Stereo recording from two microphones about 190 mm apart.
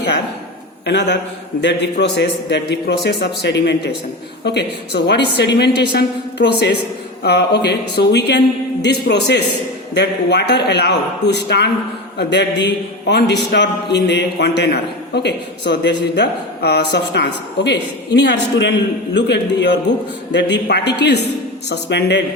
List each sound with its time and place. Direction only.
0.9 s a man's voice: 65° left (ahead or behind)